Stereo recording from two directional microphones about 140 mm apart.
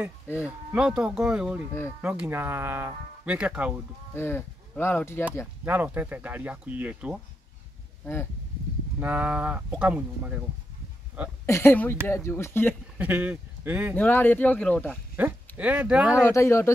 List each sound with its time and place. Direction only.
0.7 s speech: 5° right (ahead or behind)
4.1 s speech: 15° left (ahead or behind)
5.7 s speech: 10° right (ahead or behind)
8.0 s speech: 15° left (ahead or behind)
9.0 s speech: 10° right (ahead or behind)
11.4 s speech: 20° left (ahead or behind)
12.9 s speech: 10° right (ahead or behind)
13.9 s speech: 15° left (ahead or behind)
15.1 s speech: 15° right (ahead or behind)
16.3 s speech: 20° left (ahead or behind)